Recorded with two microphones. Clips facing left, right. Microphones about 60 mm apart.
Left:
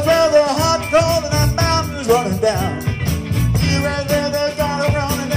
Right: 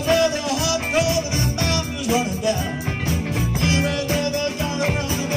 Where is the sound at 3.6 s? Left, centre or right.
Left.